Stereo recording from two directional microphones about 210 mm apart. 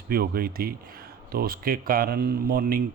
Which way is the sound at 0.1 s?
45° right (ahead or behind).